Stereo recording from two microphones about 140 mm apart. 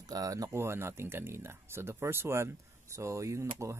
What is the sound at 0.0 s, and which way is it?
Speech, 25° right (ahead or behind).